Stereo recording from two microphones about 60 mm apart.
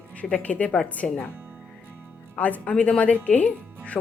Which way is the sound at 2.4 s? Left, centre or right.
Left.